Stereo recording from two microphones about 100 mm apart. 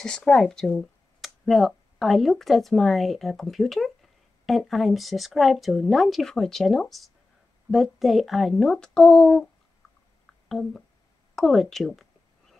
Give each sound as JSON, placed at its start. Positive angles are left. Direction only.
{"t": 0.0, "sound": "speech", "side_deg": 5}
{"t": 10.5, "sound": "speech", "side_deg": 5}
{"t": 11.3, "sound": "a sound", "side_deg": 0}